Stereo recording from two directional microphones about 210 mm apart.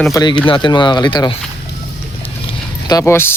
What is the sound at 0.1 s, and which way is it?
Speech, 20° left (ahead or behind).